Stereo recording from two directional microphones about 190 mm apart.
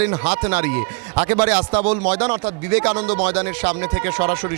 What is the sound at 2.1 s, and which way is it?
Speech, 15° right (ahead or behind).